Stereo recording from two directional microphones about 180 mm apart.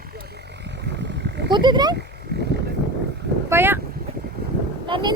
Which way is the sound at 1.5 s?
25° right (ahead or behind).